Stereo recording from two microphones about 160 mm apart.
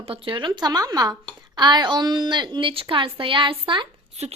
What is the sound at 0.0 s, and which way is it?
A woman's voice, 35° right (ahead or behind).